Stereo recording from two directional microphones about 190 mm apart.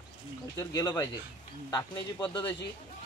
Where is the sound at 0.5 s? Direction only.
20° left (ahead or behind).